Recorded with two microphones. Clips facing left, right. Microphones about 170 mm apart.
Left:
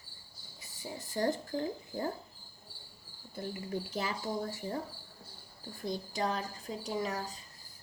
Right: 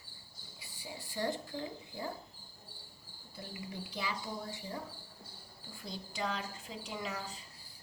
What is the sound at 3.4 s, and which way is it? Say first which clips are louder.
A woman's voice: left 7 dB; 45° left (ahead or behind).